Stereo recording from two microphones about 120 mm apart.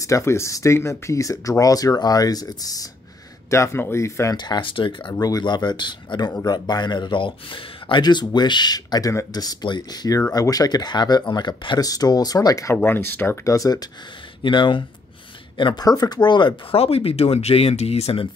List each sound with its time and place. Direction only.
0.0 s speech: 25° left (ahead or behind)
4.4 s speech: 40° left (ahead or behind)
5.1 s speech: 30° left (ahead or behind)
14.4 s speech: 40° left (ahead or behind)
16.8 s speech: 55° left (ahead or behind)